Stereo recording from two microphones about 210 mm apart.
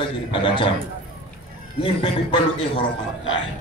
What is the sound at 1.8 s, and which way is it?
Speech, 25° left (ahead or behind).